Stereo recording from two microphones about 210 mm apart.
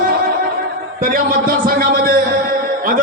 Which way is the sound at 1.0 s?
45° right (ahead or behind).